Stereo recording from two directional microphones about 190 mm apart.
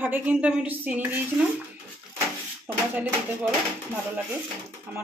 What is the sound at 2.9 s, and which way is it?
Speech, 10° right (ahead or behind).